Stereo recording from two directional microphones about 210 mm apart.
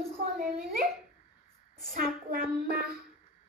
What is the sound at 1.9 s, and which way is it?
Speech, 45° right (ahead or behind).